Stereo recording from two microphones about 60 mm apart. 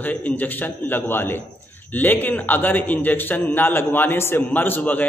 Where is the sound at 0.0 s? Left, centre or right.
Left.